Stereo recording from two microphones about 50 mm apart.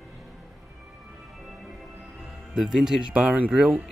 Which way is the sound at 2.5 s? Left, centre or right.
Centre.